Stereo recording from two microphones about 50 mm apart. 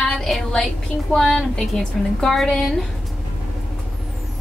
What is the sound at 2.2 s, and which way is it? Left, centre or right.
Speech, centre.